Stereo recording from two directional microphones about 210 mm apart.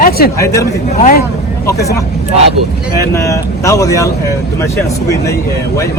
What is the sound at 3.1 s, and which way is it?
Speech, 15° left (ahead or behind).